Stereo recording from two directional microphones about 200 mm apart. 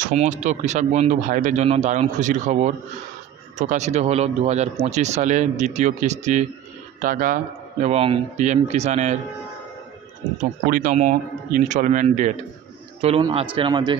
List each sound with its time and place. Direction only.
0.0 s speech: 35° right (ahead or behind)
7.8 s speech: 30° right (ahead or behind)
10.7 s a man's voice: 40° right (ahead or behind); by 13.9 s 25° right (ahead or behind)